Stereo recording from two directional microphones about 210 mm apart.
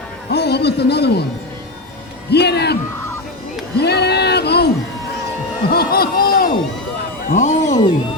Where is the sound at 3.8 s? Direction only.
50° left (ahead or behind).